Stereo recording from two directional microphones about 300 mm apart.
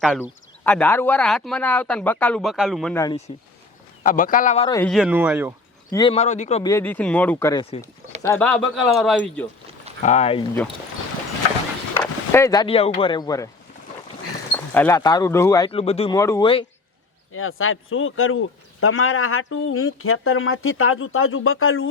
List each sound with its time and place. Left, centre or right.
0.0 s speech: centre
4.0 s a man's voice: left
4.9 s speech: centre
5.9 s speech: centre
8.3 s speech: centre
10.0 s a man's voice: left
11.9 s speech: centre
14.5 s speech: centre
17.3 s speech: left